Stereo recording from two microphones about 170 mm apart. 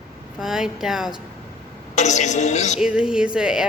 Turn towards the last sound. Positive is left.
turn(degrees=-5)  # may be behind; listen again after turning